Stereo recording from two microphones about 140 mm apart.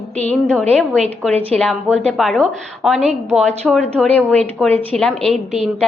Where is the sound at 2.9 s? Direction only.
50° right (ahead or behind).